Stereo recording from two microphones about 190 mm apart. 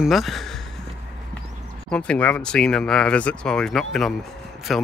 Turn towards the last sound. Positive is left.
turn(degrees=0)  # may be behind; listen again after turning